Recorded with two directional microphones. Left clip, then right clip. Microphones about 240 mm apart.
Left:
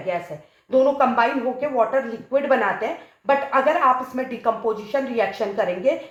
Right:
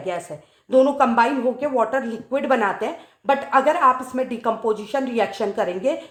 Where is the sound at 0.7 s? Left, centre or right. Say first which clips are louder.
Right 1 dB; right.